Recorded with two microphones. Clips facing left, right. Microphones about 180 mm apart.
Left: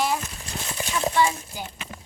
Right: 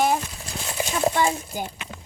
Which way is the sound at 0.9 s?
40° right (ahead or behind).